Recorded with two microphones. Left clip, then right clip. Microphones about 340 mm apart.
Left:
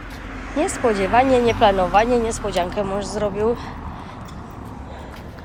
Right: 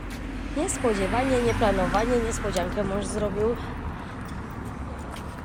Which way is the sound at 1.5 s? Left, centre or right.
Centre.